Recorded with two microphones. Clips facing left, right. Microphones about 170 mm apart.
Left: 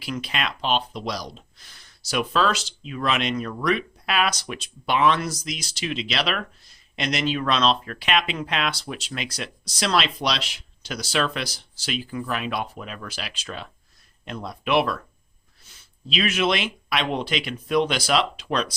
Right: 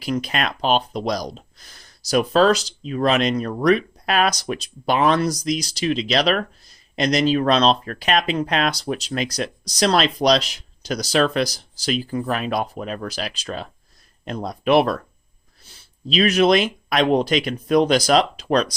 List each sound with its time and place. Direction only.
0.0 s speech: 45° right (ahead or behind)